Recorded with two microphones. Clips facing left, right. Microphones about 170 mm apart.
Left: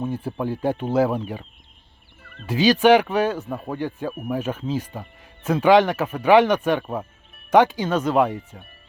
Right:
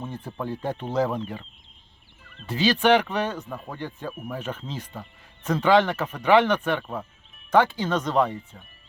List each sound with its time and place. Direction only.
0.0 s speech: 10° left (ahead or behind)
2.2 s fowl: 55° left (ahead or behind)
2.5 s speech: 10° left (ahead or behind)